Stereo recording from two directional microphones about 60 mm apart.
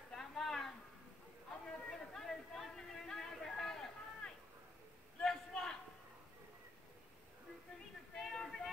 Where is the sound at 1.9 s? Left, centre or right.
Centre.